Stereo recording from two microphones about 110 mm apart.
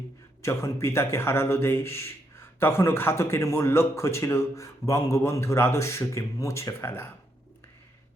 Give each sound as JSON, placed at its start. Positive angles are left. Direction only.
{"t": 0.4, "sound": "a man's voice", "side_deg": 25}